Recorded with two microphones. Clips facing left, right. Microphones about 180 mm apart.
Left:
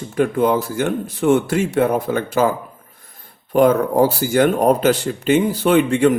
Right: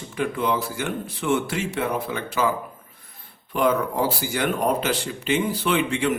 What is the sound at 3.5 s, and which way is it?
Speech, 45° left (ahead or behind).